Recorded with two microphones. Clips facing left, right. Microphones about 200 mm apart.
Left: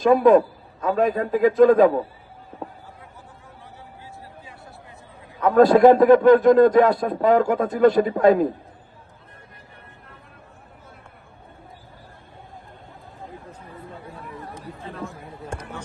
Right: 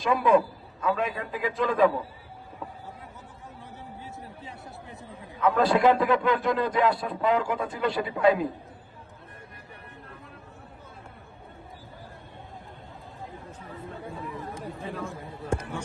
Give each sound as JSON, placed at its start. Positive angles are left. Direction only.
{"t": 0.0, "sound": "a man's voice", "side_deg": 45}
{"t": 5.4, "sound": "a man's voice", "side_deg": 45}